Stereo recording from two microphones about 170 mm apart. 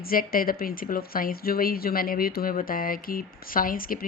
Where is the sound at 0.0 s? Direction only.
60° left (ahead or behind).